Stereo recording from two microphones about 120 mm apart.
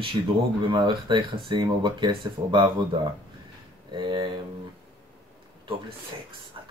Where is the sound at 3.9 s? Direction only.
40° right (ahead or behind).